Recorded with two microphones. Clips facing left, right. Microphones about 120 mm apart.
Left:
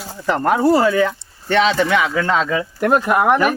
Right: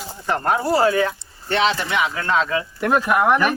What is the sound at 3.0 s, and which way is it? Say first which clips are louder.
Speech: even; 30° left (ahead or behind).